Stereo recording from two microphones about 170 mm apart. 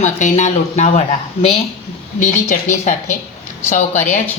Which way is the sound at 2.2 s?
45° left (ahead or behind).